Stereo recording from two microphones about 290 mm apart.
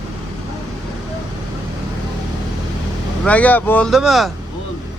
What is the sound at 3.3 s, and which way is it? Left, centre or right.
Speech, centre.